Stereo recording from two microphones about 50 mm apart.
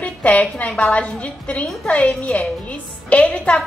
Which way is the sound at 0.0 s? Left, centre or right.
Left.